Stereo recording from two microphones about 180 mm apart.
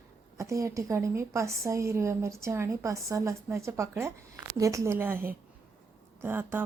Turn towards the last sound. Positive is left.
turn(degrees=-10)  # may be behind; listen again after turning